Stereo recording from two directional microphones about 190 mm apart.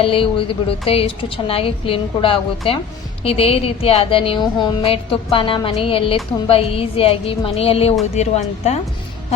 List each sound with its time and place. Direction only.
0.0 s a woman's voice: 30° left (ahead or behind)